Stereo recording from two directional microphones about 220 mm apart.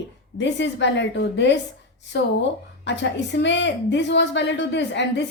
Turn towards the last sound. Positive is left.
turn(degrees=55)  # may be behind; listen again after turning